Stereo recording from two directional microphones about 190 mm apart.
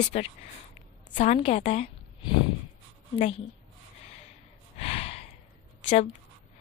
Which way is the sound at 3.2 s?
30° left (ahead or behind).